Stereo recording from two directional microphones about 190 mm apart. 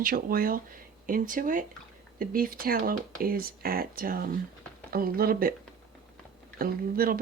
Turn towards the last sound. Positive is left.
turn(degrees=-50)  # may be behind; listen again after turning